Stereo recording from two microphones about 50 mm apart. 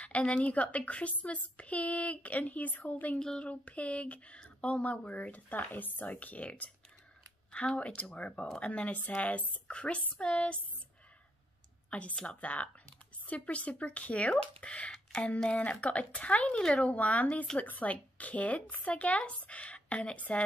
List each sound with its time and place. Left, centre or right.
0.0 s speech: left
3.2 s speech: centre
3.4 s speech: left
11.9 s speech: left